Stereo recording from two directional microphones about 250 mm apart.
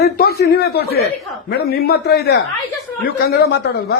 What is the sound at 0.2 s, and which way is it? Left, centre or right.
A woman's voice, left.